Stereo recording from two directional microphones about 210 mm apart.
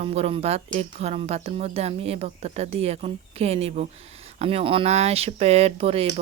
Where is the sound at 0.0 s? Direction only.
30° right (ahead or behind).